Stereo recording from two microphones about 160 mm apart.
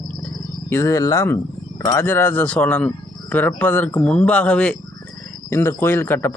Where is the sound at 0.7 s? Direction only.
20° left (ahead or behind).